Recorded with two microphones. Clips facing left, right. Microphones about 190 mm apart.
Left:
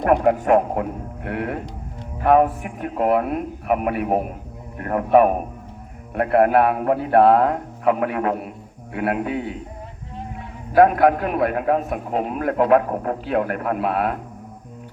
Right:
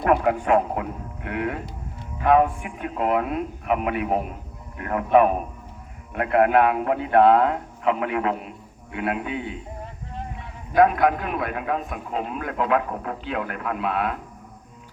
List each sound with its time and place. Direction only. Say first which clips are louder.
0.0 s a man's voice: left 3 dB; 40° left (ahead or behind)
10.8 s a man's voice: left 4 dB; 35° left (ahead or behind)